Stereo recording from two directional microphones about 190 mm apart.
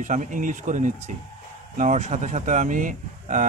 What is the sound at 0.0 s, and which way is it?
Speech, 40° right (ahead or behind).